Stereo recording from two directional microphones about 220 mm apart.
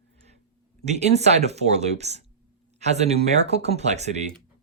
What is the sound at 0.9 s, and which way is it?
Speech, 30° right (ahead or behind).